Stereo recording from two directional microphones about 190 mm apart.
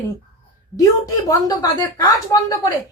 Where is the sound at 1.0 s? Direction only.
20° left (ahead or behind).